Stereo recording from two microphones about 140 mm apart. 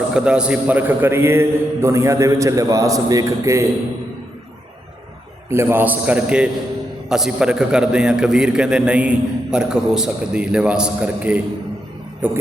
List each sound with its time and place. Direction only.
0.1 s a man's voice: 5° right (ahead or behind)
5.5 s a man's voice: 15° right (ahead or behind)